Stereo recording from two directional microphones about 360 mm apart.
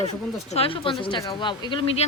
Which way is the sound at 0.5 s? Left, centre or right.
Centre.